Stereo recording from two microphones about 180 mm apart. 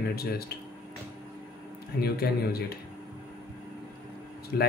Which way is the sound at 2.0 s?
60° left (ahead or behind).